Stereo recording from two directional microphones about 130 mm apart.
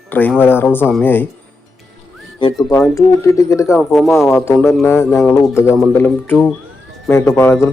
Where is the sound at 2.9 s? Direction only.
25° left (ahead or behind).